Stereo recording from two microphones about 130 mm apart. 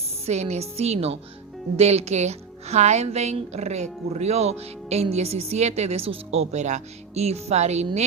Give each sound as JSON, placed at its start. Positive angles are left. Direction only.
{"t": 0.3, "sound": "speech", "side_deg": -55}